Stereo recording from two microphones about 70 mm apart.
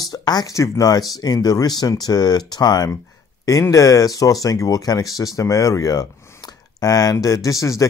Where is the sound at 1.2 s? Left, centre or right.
Left.